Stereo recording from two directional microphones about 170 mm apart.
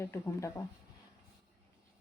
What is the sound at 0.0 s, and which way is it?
Speech, 15° left (ahead or behind).